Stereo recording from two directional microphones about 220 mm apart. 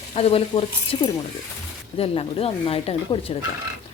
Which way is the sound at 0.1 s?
25° left (ahead or behind).